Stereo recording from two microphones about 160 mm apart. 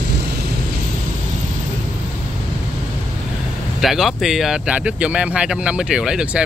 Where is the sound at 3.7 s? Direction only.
Centre (ahead or behind).